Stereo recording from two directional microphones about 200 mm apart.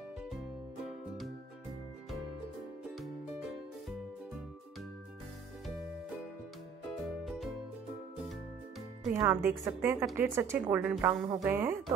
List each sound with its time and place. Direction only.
0.8 s music: centre (ahead or behind)
2.8 s music: centre (ahead or behind)
7.0 s music: centre (ahead or behind)
9.2 s speech: 10° right (ahead or behind)